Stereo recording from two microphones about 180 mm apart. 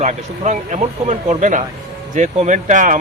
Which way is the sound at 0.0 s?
40° right (ahead or behind).